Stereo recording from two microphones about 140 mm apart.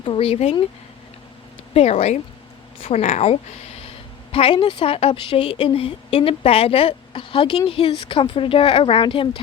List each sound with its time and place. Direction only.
0.0 s speech: 40° left (ahead or behind)
1.7 s speech: 50° left (ahead or behind)
3.8 s a woman's voice: 45° left (ahead or behind)